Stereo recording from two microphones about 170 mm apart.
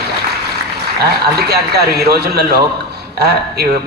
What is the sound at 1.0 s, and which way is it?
A man's voice, 70° right (ahead or behind).